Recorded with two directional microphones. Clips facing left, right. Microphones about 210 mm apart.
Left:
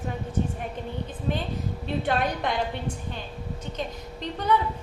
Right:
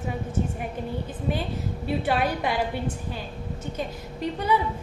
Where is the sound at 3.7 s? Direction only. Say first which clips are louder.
Right 1 dB; 10° right (ahead or behind).